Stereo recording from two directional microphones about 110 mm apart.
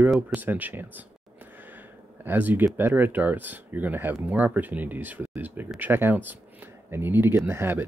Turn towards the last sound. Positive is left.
turn(degrees=-20)  # may be behind; listen again after turning